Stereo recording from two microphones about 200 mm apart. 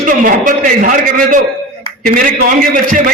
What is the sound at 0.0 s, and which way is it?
A man's voice, 40° right (ahead or behind).